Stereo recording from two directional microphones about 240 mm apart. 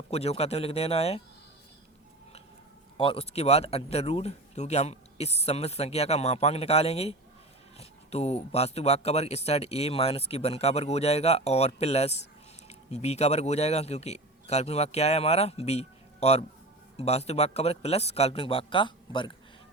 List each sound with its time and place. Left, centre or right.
0.1 s speech: left
3.0 s speech: left